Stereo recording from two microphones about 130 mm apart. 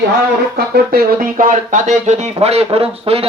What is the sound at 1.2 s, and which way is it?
Speech, 85° right.